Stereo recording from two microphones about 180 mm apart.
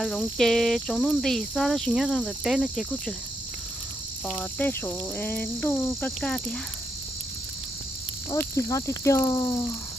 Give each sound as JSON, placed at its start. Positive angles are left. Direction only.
{"t": 0.0, "sound": "cricket", "side_deg": 0}
{"t": 4.4, "sound": "cricket", "side_deg": 10}
{"t": 8.3, "sound": "speech", "side_deg": 20}